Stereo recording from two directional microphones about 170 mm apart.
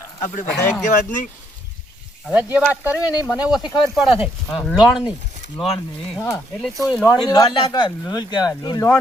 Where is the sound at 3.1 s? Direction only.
25° left (ahead or behind).